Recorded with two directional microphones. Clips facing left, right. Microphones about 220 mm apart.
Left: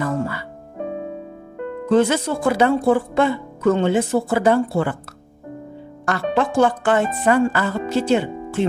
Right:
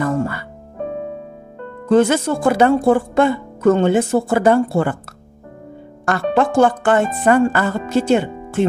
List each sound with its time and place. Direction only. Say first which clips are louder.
0.0 s music: right 3 dB; 50° right (ahead or behind)
1.9 s speech: right 3 dB; 50° right (ahead or behind)
6.0 s speech: right 3 dB; 50° right (ahead or behind)